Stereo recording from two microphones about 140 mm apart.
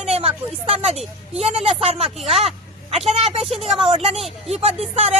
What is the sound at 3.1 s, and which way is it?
Speech, 45° right (ahead or behind).